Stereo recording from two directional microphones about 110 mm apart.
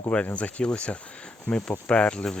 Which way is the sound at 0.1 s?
10° left (ahead or behind).